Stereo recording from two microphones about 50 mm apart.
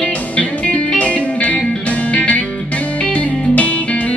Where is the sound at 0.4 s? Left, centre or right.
Left.